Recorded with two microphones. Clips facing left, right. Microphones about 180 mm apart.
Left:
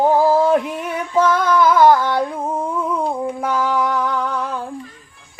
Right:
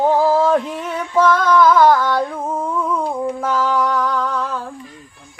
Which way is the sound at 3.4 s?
15° left (ahead or behind).